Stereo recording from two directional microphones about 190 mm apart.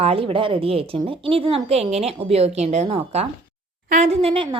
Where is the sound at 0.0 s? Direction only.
30° right (ahead or behind).